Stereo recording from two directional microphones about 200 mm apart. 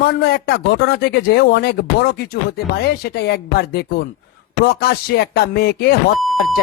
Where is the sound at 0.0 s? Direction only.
55° left (ahead or behind).